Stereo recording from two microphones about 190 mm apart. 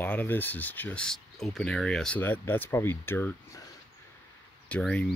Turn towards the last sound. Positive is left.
turn(degrees=5)  # may be behind; listen again after turning